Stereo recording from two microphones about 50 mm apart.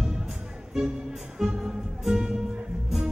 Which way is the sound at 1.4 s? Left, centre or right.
Centre.